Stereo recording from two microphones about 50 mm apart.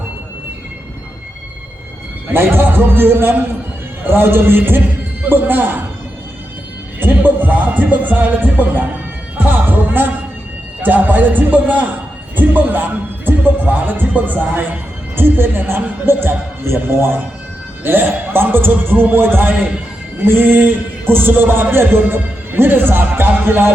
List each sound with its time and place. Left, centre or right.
2.3 s a man's voice: right
7.0 s music: right
12.4 s speech: right
15.1 s a man's voice: right
20.2 s music: right
21.1 s a man's voice: right